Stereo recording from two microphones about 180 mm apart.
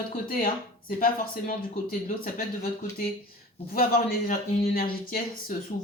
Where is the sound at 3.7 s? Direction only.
55° left (ahead or behind).